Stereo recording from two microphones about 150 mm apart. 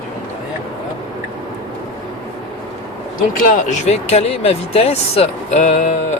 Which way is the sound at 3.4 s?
55° left (ahead or behind).